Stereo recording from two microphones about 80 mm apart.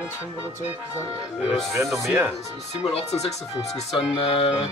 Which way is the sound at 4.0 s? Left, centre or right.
Left.